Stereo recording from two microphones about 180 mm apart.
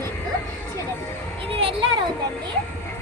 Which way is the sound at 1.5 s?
30° right (ahead or behind).